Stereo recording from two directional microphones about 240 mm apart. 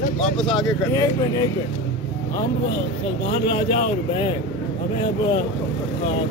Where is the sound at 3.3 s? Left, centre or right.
Left.